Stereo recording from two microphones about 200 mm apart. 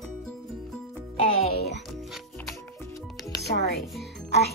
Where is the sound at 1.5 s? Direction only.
55° left (ahead or behind).